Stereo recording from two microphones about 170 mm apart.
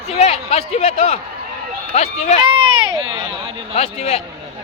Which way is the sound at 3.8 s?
40° left (ahead or behind).